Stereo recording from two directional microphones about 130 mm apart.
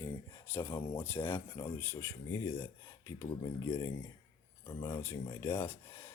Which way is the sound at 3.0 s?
25° left (ahead or behind).